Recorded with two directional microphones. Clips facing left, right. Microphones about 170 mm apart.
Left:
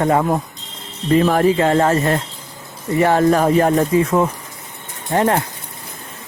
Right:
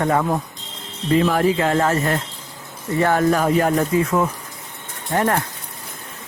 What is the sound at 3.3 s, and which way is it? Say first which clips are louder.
A man's voice: left 3 dB; 40° left (ahead or behind).